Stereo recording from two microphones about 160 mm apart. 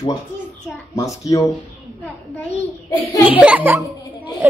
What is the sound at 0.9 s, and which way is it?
Speech, 20° left (ahead or behind).